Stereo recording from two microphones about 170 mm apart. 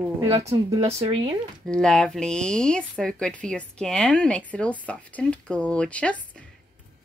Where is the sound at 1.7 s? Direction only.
5° left (ahead or behind).